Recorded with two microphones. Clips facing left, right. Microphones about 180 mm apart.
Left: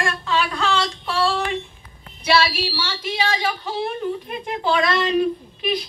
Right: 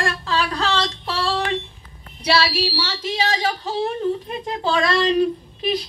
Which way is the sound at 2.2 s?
35° right (ahead or behind).